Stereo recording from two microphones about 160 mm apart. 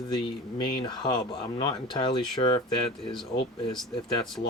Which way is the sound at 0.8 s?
30° left (ahead or behind).